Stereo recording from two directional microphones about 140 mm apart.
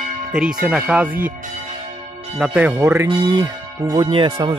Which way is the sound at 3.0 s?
30° right (ahead or behind).